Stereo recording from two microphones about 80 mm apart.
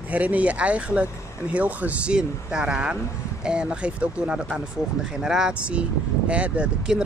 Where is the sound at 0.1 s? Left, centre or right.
Centre.